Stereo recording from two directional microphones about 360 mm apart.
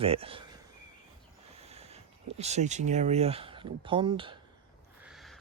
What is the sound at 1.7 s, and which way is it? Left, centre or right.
Speech, centre.